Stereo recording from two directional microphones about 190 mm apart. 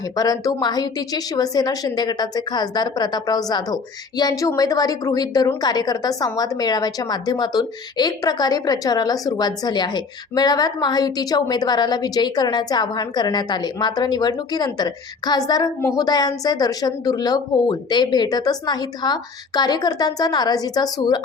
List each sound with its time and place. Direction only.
0.2 s a woman's voice: 20° left (ahead or behind)